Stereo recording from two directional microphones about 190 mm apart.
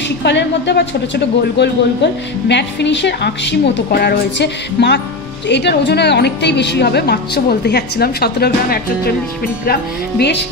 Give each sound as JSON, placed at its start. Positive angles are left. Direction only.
{"t": 0.2, "sound": "a woman's voice", "side_deg": 65}